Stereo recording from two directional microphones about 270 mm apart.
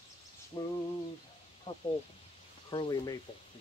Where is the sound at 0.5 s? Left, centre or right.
Centre.